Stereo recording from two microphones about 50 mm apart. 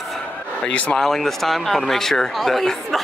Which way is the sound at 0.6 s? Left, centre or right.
Left.